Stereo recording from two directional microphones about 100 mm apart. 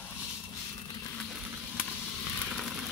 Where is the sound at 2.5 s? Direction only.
Centre (ahead or behind).